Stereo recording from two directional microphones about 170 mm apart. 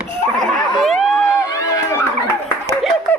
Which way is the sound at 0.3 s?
5° left (ahead or behind).